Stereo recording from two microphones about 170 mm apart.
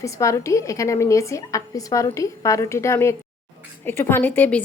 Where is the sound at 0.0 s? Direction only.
20° left (ahead or behind).